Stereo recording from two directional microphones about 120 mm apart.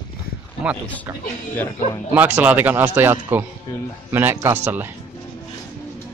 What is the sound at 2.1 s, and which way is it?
Speech, 15° right (ahead or behind).